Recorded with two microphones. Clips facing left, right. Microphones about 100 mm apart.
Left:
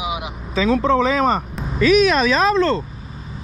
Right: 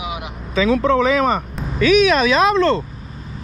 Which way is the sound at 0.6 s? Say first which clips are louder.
Right 1 dB; 35° left (ahead or behind).